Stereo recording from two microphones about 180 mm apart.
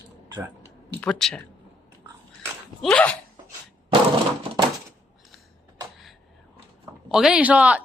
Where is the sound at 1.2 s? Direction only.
Centre (ahead or behind).